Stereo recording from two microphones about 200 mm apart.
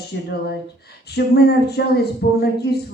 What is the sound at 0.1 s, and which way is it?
Speech, 60° left (ahead or behind).